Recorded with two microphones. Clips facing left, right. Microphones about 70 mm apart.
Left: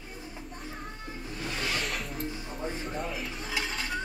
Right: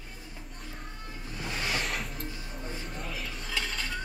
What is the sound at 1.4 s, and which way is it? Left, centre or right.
Music, centre.